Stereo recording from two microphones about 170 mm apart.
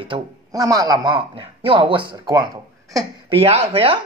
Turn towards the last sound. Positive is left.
turn(degrees=-35)  # may be behind; listen again after turning